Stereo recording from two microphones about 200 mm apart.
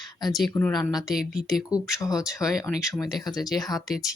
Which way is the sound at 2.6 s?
15° left (ahead or behind).